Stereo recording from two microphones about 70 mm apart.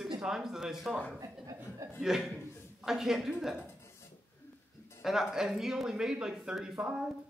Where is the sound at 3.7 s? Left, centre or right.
Left.